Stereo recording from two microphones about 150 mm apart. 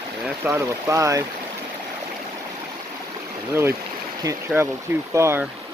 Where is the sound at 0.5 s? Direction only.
20° right (ahead or behind).